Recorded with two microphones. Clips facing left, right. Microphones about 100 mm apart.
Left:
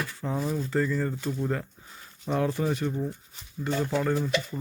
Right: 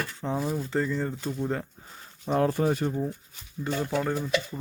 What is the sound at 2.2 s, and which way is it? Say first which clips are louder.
Speech: right 3 dB; 35° right (ahead or behind).